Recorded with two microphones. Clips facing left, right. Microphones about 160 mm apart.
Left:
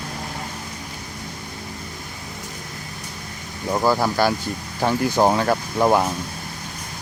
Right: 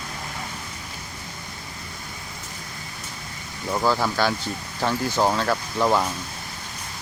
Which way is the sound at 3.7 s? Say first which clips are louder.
Left 3 dB; 15° left (ahead or behind).